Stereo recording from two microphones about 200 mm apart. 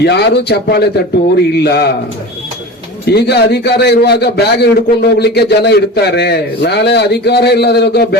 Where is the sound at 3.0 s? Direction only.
55° left (ahead or behind).